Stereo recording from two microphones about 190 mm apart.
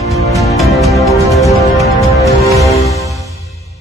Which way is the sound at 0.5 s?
Centre (ahead or behind).